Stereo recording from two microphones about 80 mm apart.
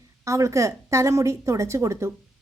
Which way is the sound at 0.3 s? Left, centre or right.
Right.